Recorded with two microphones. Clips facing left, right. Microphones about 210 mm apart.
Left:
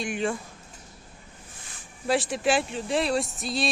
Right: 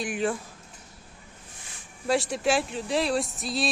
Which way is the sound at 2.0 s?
Centre (ahead or behind).